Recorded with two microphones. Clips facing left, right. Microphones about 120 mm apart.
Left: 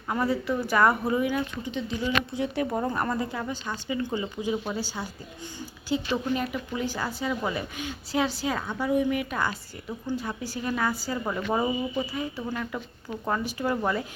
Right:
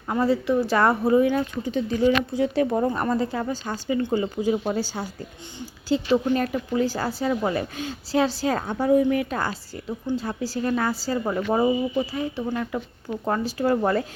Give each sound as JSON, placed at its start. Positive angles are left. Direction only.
{"t": 0.1, "sound": "speech", "side_deg": -25}
{"t": 2.4, "sound": "speech", "side_deg": -25}
{"t": 3.3, "sound": "speech", "side_deg": -40}
{"t": 11.3, "sound": "speech", "side_deg": -20}
{"t": 13.2, "sound": "speech", "side_deg": -35}